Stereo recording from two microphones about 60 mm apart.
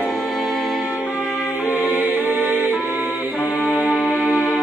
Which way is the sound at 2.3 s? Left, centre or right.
Right.